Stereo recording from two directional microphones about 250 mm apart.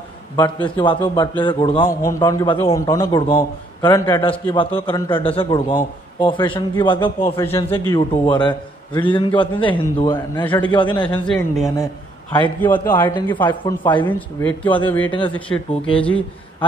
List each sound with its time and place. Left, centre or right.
0.4 s a man's voice: centre
7.3 s a man's voice: centre
11.2 s a man's voice: centre
11.8 s a man's voice: centre
13.8 s a man's voice: centre
14.8 s a man's voice: centre
15.0 s a man's voice: centre
15.3 s a man's voice: centre